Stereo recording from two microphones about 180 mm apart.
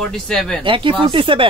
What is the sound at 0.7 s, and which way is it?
Speech, 30° right (ahead or behind).